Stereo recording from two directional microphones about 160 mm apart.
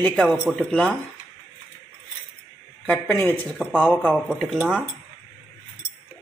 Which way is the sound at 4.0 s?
10° right (ahead or behind).